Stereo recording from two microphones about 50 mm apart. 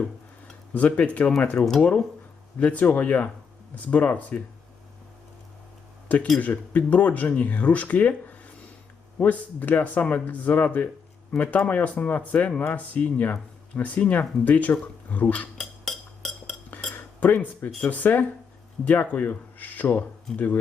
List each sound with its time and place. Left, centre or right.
0.7 s speech: left
1.5 s speech: centre
2.6 s speech: left
6.4 s speech: left
15.8 s a sound: centre
17.2 s speech: left